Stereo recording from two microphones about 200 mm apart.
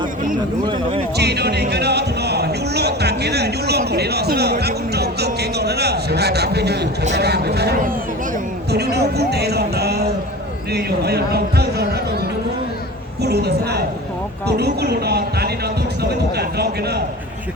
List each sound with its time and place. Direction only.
1.1 s a man's voice: 55° right (ahead or behind)
13.2 s a man's voice: 55° right (ahead or behind)